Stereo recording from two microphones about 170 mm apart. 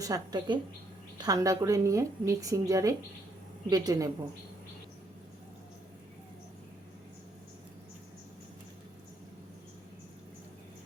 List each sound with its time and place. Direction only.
0.0 s a woman's voice: 20° right (ahead or behind)